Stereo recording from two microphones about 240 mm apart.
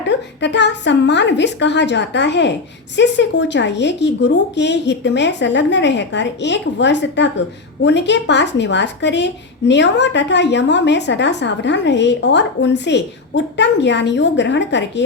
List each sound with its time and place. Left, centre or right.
0.0 s speech: left